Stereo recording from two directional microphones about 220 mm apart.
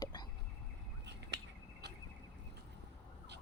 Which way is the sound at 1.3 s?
50° right (ahead or behind).